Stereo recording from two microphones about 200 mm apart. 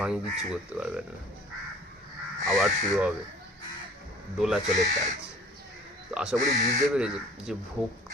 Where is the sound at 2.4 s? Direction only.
Centre (ahead or behind).